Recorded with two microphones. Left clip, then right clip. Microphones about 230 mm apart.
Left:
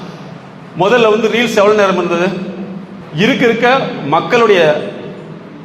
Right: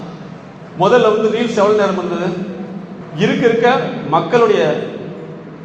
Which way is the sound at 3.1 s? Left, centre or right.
Left.